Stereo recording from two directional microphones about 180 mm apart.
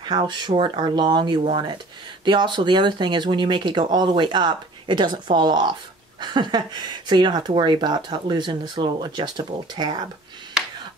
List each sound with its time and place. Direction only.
0.0 s speech: 25° right (ahead or behind)